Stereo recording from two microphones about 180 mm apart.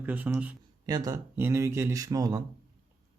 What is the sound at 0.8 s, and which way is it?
Speech, 20° right (ahead or behind).